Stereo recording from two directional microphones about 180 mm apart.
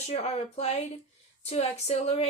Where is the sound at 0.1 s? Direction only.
35° left (ahead or behind).